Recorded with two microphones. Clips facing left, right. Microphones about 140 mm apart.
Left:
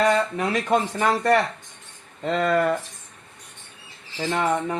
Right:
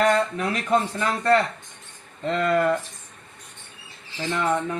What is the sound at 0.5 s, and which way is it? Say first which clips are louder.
Speech: left 1 dB; 90° left.